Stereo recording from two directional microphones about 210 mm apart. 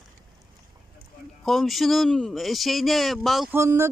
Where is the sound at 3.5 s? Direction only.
10° right (ahead or behind).